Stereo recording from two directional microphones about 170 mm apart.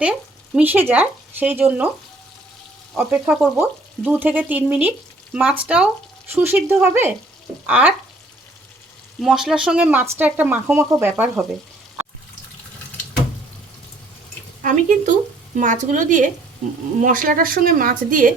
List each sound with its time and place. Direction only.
0.0 s speech: 5° right (ahead or behind)
3.0 s frying: 5° right (ahead or behind)
9.2 s speech: 5° right (ahead or behind)
10.2 s frying: 10° right (ahead or behind)
14.6 s a woman's voice: 45° right (ahead or behind)